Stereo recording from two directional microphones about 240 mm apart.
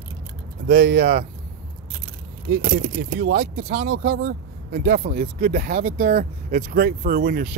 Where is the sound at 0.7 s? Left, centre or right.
Right.